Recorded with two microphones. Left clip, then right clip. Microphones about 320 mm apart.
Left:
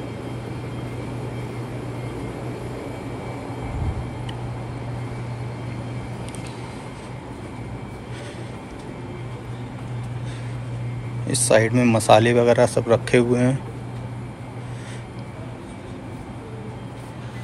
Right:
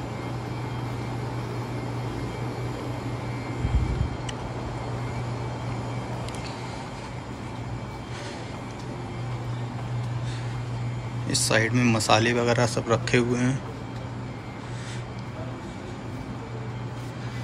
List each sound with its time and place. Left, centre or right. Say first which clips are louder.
11.2 s speech: left 6 dB; centre